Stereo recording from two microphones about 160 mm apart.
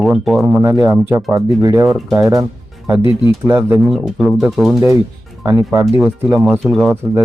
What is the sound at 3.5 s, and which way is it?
Speech, 15° right (ahead or behind).